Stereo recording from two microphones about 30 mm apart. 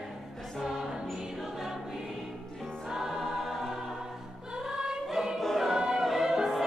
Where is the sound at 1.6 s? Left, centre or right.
Centre.